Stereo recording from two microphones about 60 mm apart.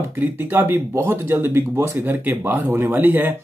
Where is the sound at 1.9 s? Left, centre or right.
Right.